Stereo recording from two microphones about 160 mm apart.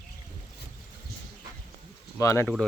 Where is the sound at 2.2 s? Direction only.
20° left (ahead or behind).